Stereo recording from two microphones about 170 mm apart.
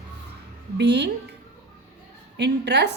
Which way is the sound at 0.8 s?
85° right.